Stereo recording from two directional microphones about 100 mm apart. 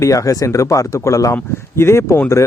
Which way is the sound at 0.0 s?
35° left (ahead or behind).